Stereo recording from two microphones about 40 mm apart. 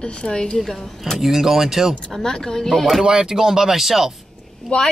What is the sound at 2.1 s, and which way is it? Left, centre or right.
Speech, centre.